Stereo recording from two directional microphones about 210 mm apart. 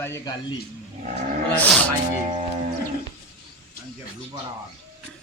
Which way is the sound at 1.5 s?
5° left (ahead or behind).